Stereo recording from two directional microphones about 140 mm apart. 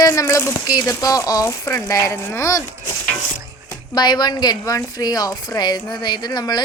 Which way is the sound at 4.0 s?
30° left (ahead or behind).